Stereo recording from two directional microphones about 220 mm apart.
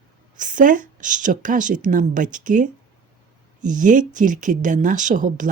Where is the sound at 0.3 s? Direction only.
35° right (ahead or behind).